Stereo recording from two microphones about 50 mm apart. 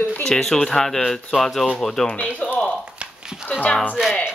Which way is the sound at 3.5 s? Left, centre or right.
Left.